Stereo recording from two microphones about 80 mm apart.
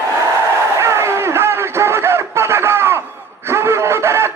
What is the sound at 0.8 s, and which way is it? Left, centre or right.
Music, right.